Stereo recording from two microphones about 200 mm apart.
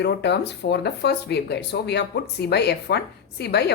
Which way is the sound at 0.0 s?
55° left (ahead or behind).